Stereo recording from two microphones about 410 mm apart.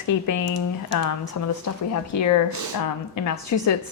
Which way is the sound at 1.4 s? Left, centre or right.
Left.